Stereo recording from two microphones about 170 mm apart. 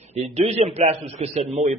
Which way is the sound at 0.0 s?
40° right (ahead or behind).